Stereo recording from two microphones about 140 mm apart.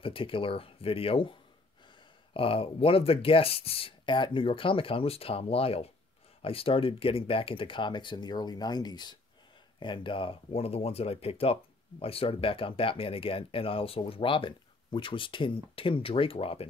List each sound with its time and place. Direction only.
0.0 s speech: 40° left (ahead or behind)
2.3 s speech: 40° left (ahead or behind)